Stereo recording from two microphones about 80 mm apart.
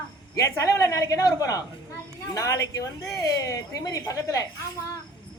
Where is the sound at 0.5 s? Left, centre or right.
Left.